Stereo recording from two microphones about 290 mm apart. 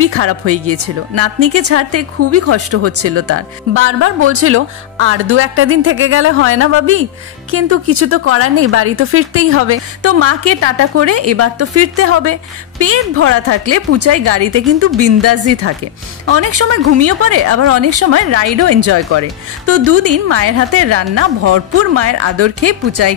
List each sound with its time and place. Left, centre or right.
0.0 s speech: right